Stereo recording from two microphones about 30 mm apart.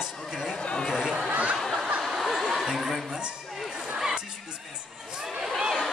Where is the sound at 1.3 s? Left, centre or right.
Right.